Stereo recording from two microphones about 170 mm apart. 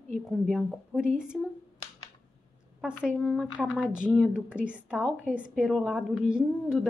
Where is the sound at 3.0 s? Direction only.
Centre (ahead or behind).